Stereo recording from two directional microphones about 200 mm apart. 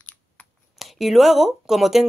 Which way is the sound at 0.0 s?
5° left (ahead or behind).